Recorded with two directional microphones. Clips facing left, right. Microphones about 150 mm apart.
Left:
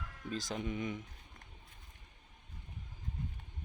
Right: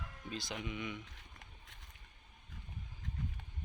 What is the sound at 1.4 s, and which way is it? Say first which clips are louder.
Boat: even; 90° right.